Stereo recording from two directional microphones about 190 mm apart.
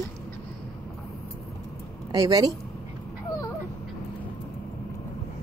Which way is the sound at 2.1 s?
20° right (ahead or behind).